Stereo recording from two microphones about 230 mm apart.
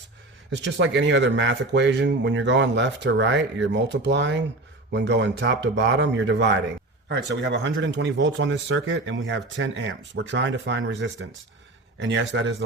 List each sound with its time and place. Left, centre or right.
0.5 s speech: right